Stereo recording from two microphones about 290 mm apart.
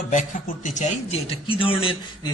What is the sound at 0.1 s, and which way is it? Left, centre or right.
Speech, left.